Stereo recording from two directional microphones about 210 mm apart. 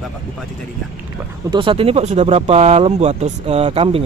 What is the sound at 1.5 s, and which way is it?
Speech, 25° right (ahead or behind).